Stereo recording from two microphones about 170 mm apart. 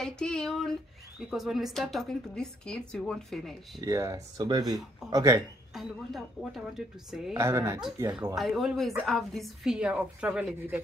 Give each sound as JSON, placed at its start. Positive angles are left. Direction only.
{"t": 0.0, "sound": "a woman's voice", "side_deg": 5}
{"t": 3.8, "sound": "speech", "side_deg": -20}
{"t": 5.8, "sound": "a woman's voice", "side_deg": 0}
{"t": 7.3, "sound": "speech", "side_deg": -15}
{"t": 8.4, "sound": "a woman's voice", "side_deg": 0}